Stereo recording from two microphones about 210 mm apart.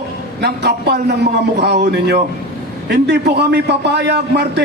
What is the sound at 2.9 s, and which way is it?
A man's voice, 55° right (ahead or behind).